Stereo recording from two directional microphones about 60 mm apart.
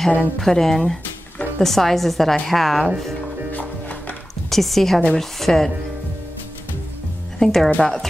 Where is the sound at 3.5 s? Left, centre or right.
Left.